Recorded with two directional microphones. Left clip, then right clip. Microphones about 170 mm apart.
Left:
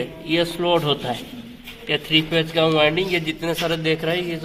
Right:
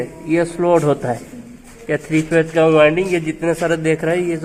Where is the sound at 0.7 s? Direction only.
80° right.